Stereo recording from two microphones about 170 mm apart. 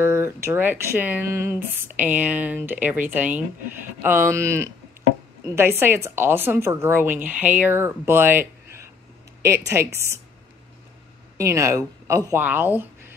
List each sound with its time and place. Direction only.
0.0 s speech: 15° right (ahead or behind)
11.3 s speech: 15° right (ahead or behind)